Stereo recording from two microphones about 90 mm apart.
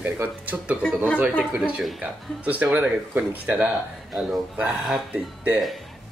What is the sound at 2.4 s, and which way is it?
Speech, 15° right (ahead or behind).